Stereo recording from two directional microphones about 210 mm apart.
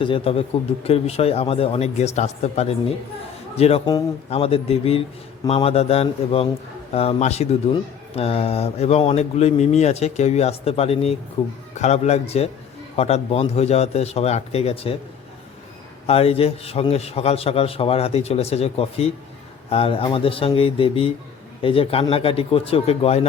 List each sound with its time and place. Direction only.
0.0 s a man's voice: 25° left (ahead or behind)
16.0 s a man's voice: 30° left (ahead or behind)